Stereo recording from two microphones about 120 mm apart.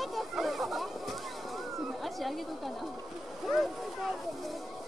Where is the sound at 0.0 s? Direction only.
Centre (ahead or behind).